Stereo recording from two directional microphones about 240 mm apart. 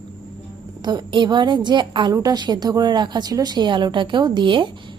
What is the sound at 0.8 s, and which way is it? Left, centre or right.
A woman's voice, centre.